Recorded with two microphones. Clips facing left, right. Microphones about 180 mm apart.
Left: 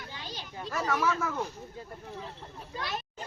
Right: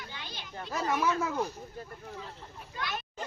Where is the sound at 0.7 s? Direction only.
15° right (ahead or behind).